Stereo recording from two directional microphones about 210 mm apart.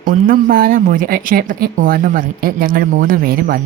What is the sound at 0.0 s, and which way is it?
Speech, 40° right (ahead or behind).